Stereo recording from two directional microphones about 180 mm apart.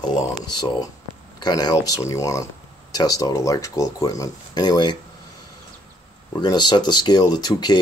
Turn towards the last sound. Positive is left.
turn(degrees=25)  # may be behind; listen again after turning